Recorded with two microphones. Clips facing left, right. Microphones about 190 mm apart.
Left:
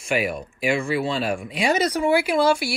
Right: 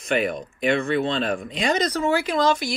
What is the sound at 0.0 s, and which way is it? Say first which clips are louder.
Speech: right 1 dB; 10° left (ahead or behind).